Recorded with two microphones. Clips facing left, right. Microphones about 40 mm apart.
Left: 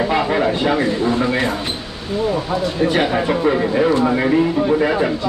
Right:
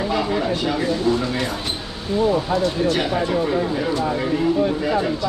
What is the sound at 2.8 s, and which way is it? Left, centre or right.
Speech, left.